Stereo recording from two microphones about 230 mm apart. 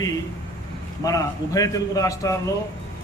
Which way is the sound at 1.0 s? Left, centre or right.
Centre.